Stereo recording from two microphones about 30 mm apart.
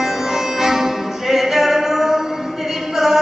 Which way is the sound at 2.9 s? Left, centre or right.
Centre.